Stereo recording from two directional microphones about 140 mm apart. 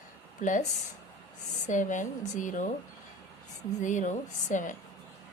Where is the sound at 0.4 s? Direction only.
65° left (ahead or behind).